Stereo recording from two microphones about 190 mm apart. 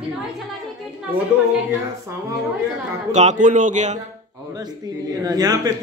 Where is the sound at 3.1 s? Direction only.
40° right (ahead or behind).